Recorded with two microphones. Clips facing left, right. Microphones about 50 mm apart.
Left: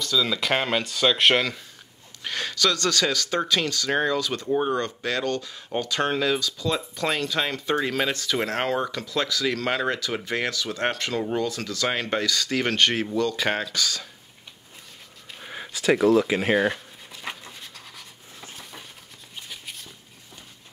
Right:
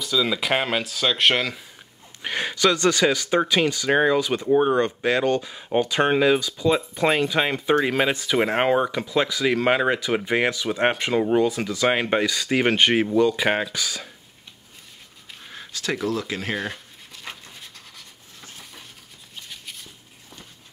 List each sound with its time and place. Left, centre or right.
0.0 s speech: centre
2.2 s speech: right
15.4 s speech: centre
17.3 s dog: centre
18.6 s a sound: centre